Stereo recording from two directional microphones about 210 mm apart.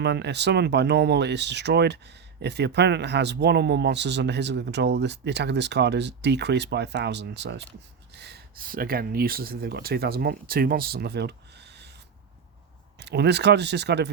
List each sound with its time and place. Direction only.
0.0 s speech: 55° right (ahead or behind)